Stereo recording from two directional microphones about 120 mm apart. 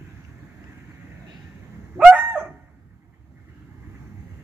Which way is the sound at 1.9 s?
10° right (ahead or behind).